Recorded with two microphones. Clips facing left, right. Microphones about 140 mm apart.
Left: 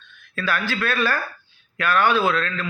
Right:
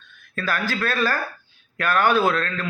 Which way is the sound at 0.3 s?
40° right (ahead or behind).